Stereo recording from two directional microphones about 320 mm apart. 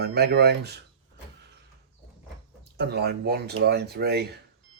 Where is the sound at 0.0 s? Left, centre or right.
Right.